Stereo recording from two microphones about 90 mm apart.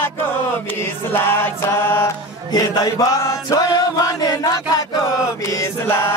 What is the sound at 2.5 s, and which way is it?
Chant, 50° left (ahead or behind).